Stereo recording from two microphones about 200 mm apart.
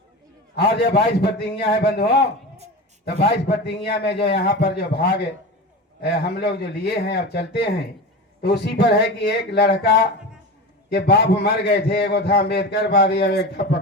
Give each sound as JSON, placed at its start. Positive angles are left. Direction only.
{"t": 0.5, "sound": "a man's voice", "side_deg": 55}
{"t": 3.7, "sound": "a man's voice", "side_deg": 55}